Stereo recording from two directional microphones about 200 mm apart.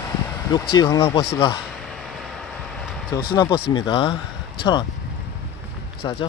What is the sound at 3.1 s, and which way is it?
Speech, 20° left (ahead or behind).